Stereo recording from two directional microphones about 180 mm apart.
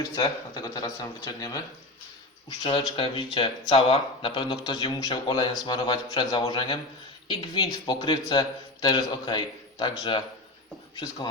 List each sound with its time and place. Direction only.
0.0 s speech: 20° left (ahead or behind)